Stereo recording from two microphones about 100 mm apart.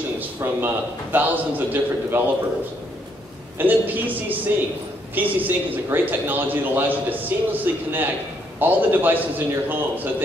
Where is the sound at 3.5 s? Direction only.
20° right (ahead or behind).